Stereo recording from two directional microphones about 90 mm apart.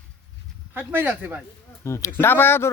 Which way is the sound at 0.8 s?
20° right (ahead or behind).